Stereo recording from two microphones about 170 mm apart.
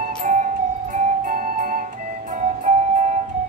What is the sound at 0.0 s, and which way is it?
Music, 55° right (ahead or behind).